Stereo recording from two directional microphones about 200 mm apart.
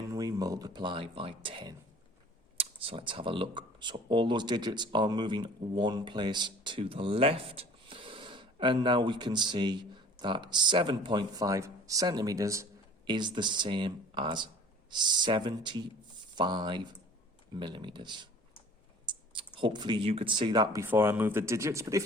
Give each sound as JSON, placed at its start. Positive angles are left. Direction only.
{"t": 0.1, "sound": "speech", "side_deg": -20}
{"t": 19.5, "sound": "speech", "side_deg": -25}